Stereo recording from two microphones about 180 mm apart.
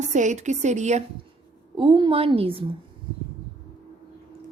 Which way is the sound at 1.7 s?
25° right (ahead or behind).